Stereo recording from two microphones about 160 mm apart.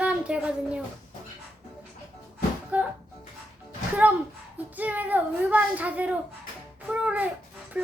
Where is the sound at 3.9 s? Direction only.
10° right (ahead or behind).